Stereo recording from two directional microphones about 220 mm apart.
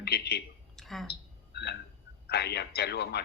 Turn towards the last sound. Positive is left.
turn(degrees=50)  # may be behind; listen again after turning